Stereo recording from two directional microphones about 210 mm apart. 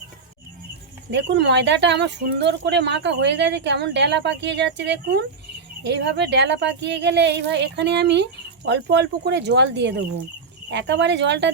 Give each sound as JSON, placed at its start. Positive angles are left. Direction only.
{"t": 1.1, "sound": "speech", "side_deg": -55}